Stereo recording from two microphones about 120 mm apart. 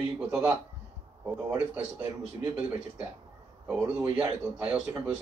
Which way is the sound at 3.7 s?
10° right (ahead or behind).